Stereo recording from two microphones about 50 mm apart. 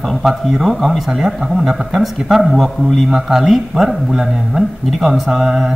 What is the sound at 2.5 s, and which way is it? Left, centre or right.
Speech, centre.